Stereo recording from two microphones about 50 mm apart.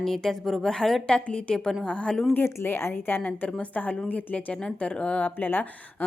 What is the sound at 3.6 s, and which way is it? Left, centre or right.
Speech, left.